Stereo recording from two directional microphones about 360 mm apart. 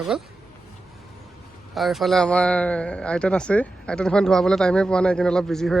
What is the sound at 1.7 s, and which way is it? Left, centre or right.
Speech, centre.